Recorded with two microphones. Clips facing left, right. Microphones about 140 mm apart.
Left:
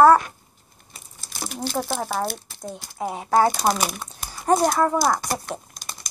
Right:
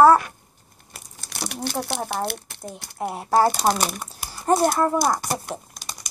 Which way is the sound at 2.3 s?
65° right (ahead or behind).